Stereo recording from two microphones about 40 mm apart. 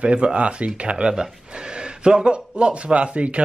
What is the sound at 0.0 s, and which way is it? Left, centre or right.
Speech, right.